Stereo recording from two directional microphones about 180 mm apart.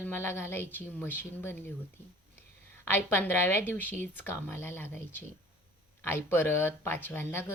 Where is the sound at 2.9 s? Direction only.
10° left (ahead or behind).